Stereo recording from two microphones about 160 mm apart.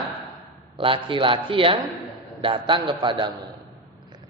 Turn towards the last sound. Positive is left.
turn(degrees=-30)  # may be behind; listen again after turning